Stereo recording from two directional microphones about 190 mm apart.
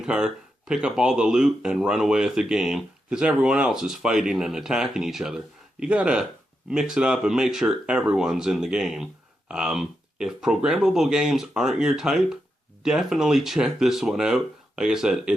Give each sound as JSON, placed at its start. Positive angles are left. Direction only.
{"t": 0.0, "sound": "speech", "side_deg": -5}